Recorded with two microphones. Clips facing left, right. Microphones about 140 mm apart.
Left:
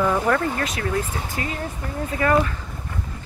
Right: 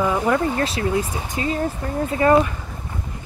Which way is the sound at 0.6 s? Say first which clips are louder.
Right 4 dB; 30° right (ahead or behind).